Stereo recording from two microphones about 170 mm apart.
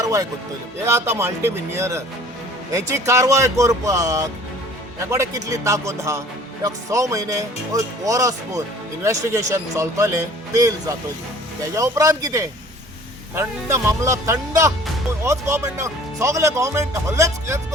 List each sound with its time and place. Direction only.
0.0 s speech: 20° right (ahead or behind)